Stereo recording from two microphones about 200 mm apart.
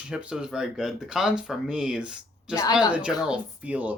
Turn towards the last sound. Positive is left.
turn(degrees=-5)  # may be behind; listen again after turning